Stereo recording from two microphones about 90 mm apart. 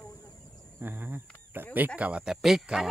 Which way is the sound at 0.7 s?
25° right (ahead or behind).